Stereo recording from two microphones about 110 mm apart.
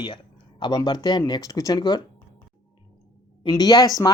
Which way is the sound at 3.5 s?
35° left (ahead or behind).